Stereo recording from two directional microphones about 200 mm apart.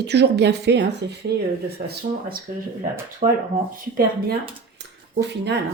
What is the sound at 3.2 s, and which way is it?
Speech, 35° right (ahead or behind).